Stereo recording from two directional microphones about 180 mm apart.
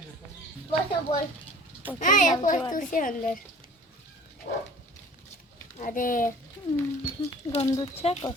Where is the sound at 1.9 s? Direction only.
45° left (ahead or behind).